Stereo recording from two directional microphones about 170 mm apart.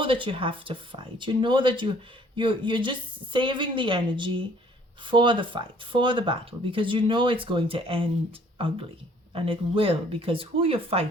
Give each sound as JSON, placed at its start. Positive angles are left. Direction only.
{"t": 0.0, "sound": "speech", "side_deg": -30}